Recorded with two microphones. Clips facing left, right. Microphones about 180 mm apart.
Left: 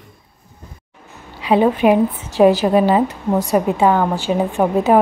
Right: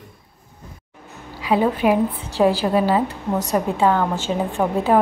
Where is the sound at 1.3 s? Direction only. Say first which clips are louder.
Left 4 dB; 20° left (ahead or behind).